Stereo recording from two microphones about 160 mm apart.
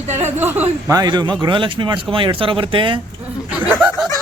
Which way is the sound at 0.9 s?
25° right (ahead or behind).